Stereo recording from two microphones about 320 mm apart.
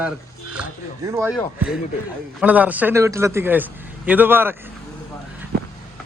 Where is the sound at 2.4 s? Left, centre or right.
Centre.